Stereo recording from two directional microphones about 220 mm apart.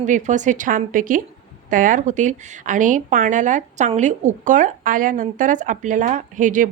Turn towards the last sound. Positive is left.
turn(degrees=-35)  # may be behind; listen again after turning